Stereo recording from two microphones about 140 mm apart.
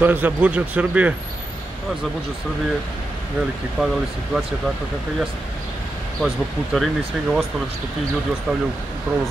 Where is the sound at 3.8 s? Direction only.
5° right (ahead or behind).